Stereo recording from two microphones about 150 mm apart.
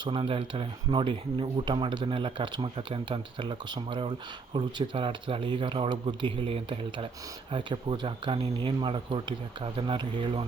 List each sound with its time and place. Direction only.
0.0 s speech: 35° right (ahead or behind)